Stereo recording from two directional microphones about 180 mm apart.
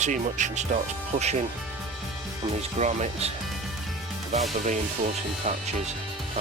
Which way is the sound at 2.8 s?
40° right (ahead or behind).